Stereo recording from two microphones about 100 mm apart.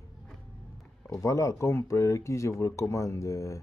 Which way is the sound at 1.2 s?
30° left (ahead or behind).